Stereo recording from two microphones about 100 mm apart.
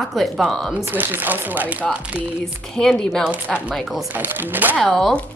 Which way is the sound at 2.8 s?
5° left (ahead or behind).